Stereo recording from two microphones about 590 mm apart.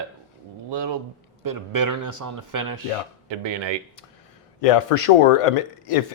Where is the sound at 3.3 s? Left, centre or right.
Right.